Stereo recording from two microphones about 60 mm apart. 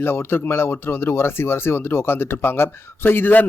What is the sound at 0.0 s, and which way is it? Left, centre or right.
A man's voice, left.